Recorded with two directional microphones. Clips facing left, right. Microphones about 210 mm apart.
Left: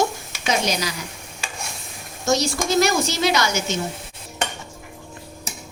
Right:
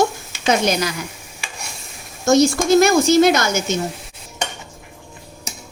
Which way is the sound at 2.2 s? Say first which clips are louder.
Right 7 dB; 50° right (ahead or behind).